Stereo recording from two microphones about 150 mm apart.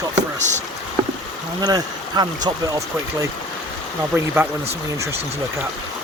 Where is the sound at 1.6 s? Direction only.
25° right (ahead or behind).